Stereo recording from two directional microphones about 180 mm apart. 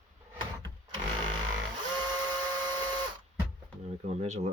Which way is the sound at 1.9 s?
25° right (ahead or behind).